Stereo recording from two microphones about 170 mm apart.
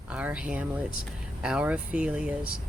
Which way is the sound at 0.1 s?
5° right (ahead or behind).